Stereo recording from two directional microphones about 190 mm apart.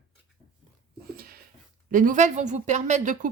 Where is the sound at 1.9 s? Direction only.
45° right (ahead or behind).